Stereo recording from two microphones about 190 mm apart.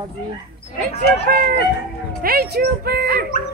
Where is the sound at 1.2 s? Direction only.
50° right (ahead or behind).